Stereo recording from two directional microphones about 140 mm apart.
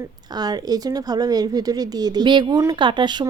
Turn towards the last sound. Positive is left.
turn(degrees=-35)  # may be behind; listen again after turning